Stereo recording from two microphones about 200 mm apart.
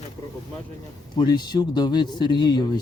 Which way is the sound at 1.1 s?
20° left (ahead or behind).